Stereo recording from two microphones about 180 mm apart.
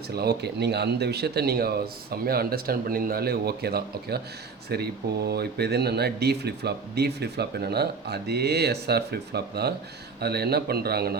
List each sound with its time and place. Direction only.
0.2 s speech: 65° right (ahead or behind)